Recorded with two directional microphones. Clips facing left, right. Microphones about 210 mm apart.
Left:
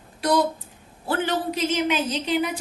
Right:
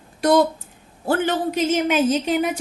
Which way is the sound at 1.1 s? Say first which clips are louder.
Right 4 dB; 50° right (ahead or behind).